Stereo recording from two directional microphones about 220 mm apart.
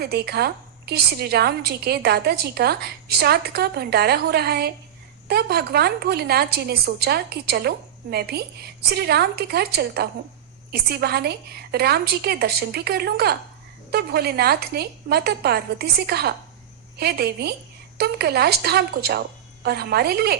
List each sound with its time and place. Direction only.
0.0 s a woman's voice: 45° right (ahead or behind)